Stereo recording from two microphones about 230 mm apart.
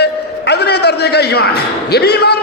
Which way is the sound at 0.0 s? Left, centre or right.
Left.